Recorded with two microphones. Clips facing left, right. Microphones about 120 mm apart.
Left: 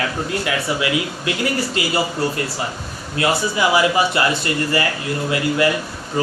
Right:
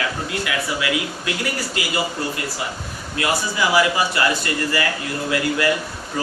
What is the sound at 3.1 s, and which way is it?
Speech, 25° left (ahead or behind).